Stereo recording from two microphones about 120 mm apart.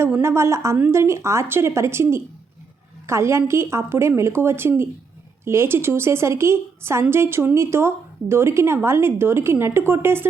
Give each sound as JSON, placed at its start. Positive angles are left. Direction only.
{"t": 0.0, "sound": "speech", "side_deg": -20}